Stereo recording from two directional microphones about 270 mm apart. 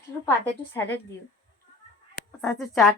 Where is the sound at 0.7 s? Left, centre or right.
Centre.